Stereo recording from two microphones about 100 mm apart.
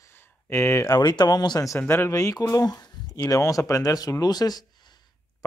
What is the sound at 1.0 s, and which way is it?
Speech, 45° left (ahead or behind).